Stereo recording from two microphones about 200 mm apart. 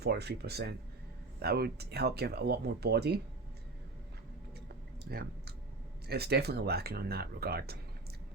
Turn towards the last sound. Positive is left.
turn(degrees=-50)  # may be behind; listen again after turning